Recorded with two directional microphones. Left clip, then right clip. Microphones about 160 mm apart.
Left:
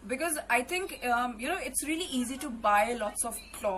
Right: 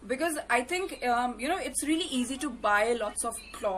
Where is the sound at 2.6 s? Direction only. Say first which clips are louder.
Even; 15° right (ahead or behind).